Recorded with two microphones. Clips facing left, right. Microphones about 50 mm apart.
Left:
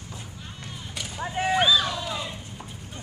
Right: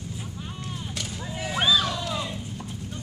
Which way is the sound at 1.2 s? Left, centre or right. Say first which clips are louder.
Left 10 dB; left.